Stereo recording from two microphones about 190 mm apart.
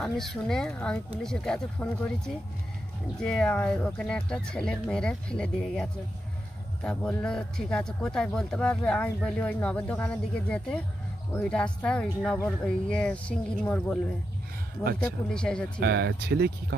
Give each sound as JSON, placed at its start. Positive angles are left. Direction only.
{"t": 0.0, "sound": "speech", "side_deg": 0}
{"t": 15.0, "sound": "speech", "side_deg": 5}
{"t": 15.8, "sound": "speech", "side_deg": -60}